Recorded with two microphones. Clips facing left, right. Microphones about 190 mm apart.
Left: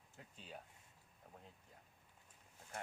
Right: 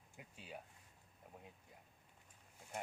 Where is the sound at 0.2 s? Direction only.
10° right (ahead or behind).